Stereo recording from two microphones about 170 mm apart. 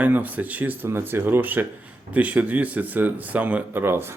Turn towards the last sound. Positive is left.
turn(degrees=-15)  # may be behind; listen again after turning